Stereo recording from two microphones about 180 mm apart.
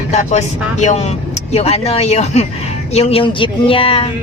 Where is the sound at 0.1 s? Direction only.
40° left (ahead or behind).